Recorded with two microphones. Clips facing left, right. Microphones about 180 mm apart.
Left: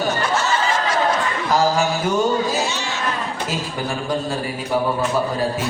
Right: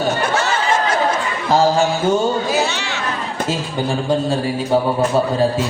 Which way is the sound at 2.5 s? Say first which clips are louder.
Right 3 dB; 65° right (ahead or behind).